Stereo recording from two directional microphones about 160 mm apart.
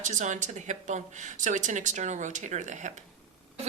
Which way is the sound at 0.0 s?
50° right (ahead or behind).